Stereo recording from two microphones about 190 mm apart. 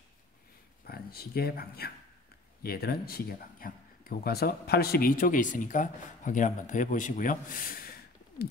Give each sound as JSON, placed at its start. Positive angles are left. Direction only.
{"t": 0.8, "sound": "speech", "side_deg": 55}